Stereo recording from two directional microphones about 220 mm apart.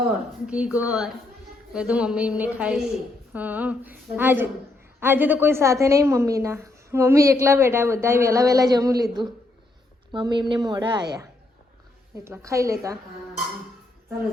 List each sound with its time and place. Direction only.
0.1 s a woman's voice: 5° right (ahead or behind)
10.1 s a woman's voice: 20° right (ahead or behind)